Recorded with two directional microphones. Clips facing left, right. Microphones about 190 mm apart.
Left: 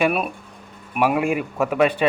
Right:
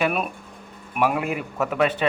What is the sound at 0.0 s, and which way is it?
A man's voice, 5° left (ahead or behind).